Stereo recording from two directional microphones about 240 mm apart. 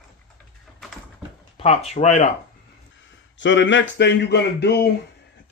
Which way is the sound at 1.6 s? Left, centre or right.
Left.